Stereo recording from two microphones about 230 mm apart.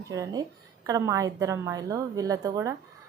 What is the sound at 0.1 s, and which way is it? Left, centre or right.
Speech, centre.